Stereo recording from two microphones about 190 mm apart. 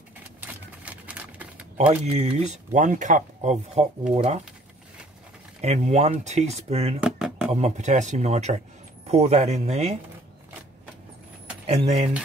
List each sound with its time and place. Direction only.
0.4 s a sound: 10° right (ahead or behind)
1.9 s speech: 35° right (ahead or behind)
5.6 s speech: 35° right (ahead or behind)
7.0 s a sound: 5° right (ahead or behind)
7.5 s speech: 35° right (ahead or behind)
11.6 s speech: 35° right (ahead or behind)